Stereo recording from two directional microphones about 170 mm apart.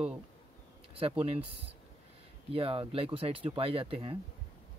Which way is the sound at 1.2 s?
35° right (ahead or behind).